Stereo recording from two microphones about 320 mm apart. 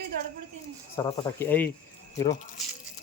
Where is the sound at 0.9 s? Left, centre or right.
Centre.